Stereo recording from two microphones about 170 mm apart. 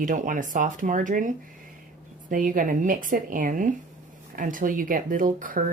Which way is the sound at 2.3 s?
55° right (ahead or behind).